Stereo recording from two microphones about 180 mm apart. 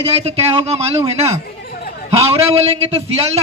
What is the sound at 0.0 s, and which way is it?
Speech, 35° right (ahead or behind).